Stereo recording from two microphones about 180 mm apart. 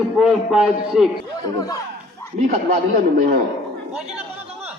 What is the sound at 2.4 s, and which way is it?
A man's voice, 50° right (ahead or behind).